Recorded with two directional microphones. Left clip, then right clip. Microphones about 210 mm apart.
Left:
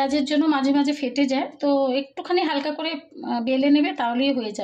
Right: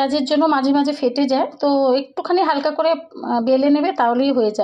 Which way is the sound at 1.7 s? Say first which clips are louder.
Right 3 dB; 20° right (ahead or behind).